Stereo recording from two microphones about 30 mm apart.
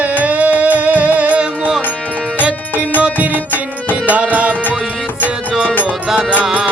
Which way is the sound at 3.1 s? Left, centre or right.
Right.